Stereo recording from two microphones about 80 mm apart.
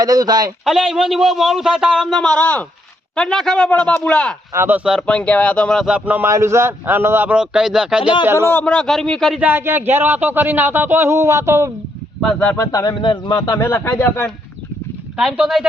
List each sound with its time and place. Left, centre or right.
0.0 s speech: right
0.6 s a man's voice: centre
2.1 s a man's voice: centre
4.5 s a man's voice: right
5.0 s a man's voice: centre
6.2 s speech: right
7.3 s speech: centre
8.2 s a man's voice: right
8.6 s a man's voice: centre
9.4 s speech: right
12.7 s speech: left
13.0 s a man's voice: left
13.4 s speech: left
15.1 s a man's voice: centre